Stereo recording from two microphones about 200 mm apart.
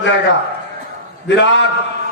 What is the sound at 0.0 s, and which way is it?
A man's voice, 65° left (ahead or behind).